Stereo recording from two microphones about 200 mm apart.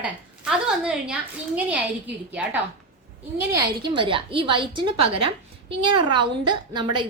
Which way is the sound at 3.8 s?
25° right (ahead or behind).